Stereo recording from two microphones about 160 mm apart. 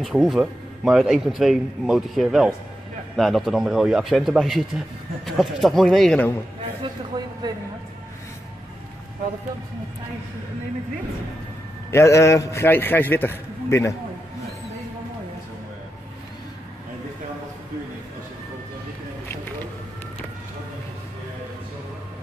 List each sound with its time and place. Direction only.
0.0 s a man's voice: centre (ahead or behind)
6.8 s a sound: 25° right (ahead or behind)
11.9 s a man's voice: 20° left (ahead or behind)